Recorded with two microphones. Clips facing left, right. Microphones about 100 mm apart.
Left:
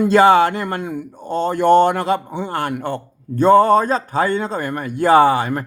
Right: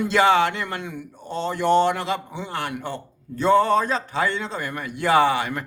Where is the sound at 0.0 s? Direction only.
40° left (ahead or behind).